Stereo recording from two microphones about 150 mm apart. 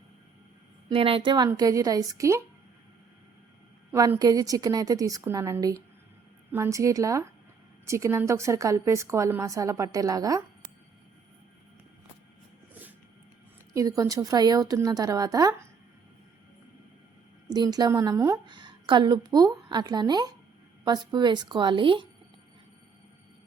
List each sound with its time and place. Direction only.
0.9 s a woman's voice: 35° right (ahead or behind); by 2.4 s 20° right (ahead or behind)
3.9 s a woman's voice: 25° right (ahead or behind)
13.7 s a woman's voice: 25° right (ahead or behind)
17.5 s a woman's voice: 25° right (ahead or behind)
18.4 s a woman's voice: 30° right (ahead or behind)